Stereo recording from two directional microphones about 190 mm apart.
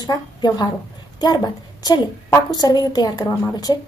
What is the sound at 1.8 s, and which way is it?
A woman's voice, 20° left (ahead or behind).